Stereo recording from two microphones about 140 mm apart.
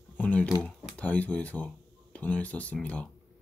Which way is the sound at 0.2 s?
10° left (ahead or behind).